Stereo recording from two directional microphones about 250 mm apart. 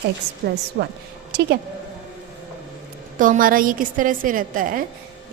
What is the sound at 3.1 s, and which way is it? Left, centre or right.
A woman's voice, right.